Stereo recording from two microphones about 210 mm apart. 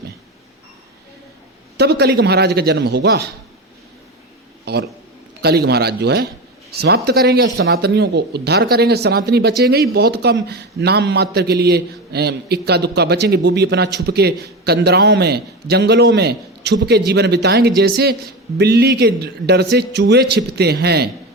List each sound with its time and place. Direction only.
1.8 s speech: 50° right (ahead or behind)
4.6 s a man's voice: 50° right (ahead or behind)